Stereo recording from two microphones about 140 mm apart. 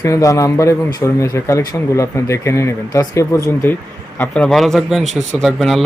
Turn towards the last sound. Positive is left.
turn(degrees=0)  # may be behind; listen again after turning